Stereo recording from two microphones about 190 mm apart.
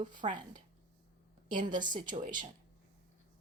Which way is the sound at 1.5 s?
45° right (ahead or behind).